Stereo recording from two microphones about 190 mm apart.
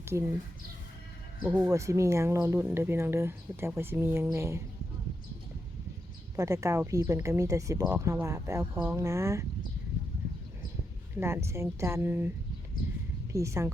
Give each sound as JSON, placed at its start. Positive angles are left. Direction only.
{"t": 0.0, "sound": "speech", "side_deg": -15}
{"t": 1.5, "sound": "a woman's voice", "side_deg": -15}
{"t": 6.3, "sound": "a woman's voice", "side_deg": -15}
{"t": 11.2, "sound": "a woman's voice", "side_deg": -15}
{"t": 13.3, "sound": "a woman's voice", "side_deg": -15}